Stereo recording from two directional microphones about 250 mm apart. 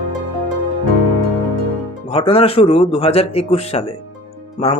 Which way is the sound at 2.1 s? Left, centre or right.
Left.